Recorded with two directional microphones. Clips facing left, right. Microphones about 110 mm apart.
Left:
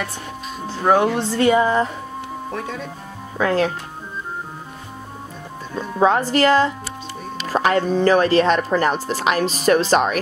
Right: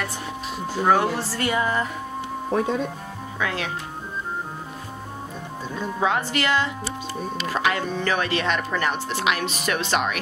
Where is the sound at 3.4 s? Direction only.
40° left (ahead or behind).